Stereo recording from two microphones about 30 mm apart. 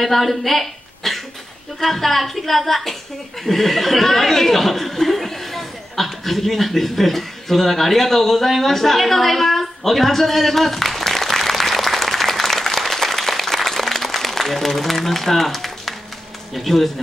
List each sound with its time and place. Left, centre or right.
0.0 s a woman's voice: centre
3.4 s a sound: centre
16.5 s speech: centre